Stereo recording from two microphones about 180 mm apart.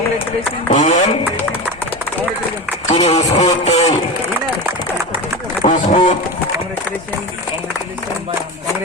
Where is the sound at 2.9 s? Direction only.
40° left (ahead or behind).